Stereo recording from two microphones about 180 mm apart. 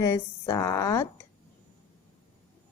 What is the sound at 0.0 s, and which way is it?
A woman's voice, 15° left (ahead or behind).